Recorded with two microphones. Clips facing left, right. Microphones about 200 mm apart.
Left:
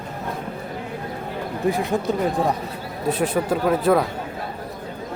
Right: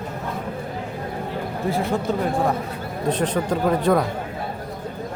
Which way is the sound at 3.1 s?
10° left (ahead or behind).